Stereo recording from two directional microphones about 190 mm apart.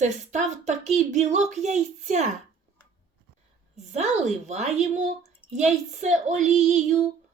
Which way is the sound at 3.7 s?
35° right (ahead or behind).